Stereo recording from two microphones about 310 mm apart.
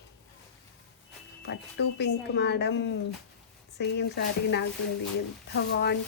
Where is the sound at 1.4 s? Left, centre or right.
Left.